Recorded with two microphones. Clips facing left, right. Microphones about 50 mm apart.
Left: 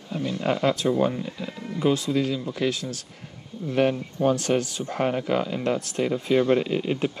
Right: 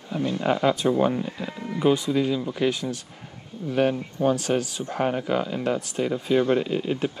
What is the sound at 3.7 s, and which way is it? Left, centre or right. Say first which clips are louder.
Speech: even; centre.